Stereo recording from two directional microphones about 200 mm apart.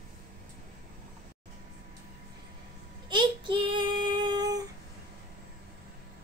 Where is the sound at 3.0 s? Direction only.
25° right (ahead or behind).